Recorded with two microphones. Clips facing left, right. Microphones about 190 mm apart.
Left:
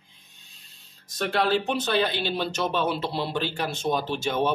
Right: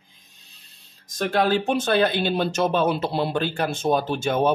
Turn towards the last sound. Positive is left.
turn(degrees=-50)  # may be behind; listen again after turning